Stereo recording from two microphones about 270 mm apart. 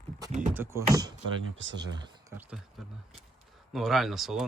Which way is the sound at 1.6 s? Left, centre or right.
Right.